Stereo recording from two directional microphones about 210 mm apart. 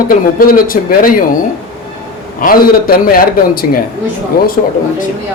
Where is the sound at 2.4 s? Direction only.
45° left (ahead or behind).